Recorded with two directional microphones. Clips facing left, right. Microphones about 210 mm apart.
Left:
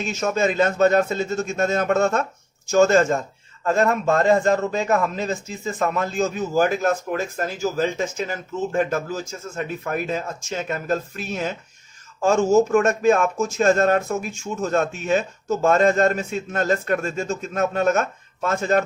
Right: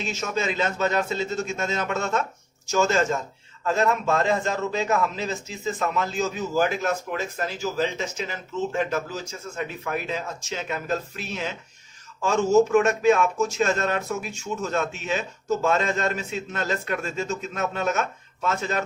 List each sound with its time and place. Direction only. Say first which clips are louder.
0.0 s a man's voice: left 6 dB; 50° left (ahead or behind)